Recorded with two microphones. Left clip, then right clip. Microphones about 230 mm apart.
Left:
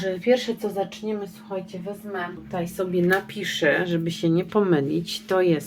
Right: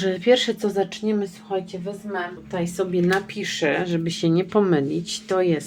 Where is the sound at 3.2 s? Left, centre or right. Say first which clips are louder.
Left 1 dB; centre.